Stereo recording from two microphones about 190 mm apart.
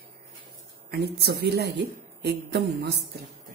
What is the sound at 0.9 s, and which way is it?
A woman's voice, 55° right (ahead or behind).